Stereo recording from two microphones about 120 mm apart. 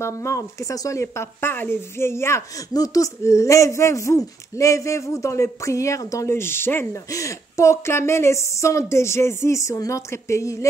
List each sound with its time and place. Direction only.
0.0 s speech: 25° left (ahead or behind)